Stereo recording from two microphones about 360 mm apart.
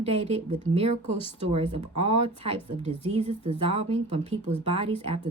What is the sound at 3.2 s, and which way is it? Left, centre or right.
Speech, centre.